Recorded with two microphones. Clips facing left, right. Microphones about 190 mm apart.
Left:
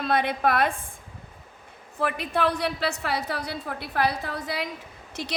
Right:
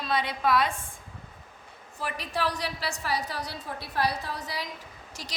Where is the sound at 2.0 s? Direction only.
55° left (ahead or behind).